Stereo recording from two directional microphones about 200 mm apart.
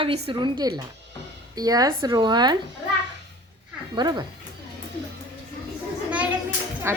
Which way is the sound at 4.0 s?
20° right (ahead or behind).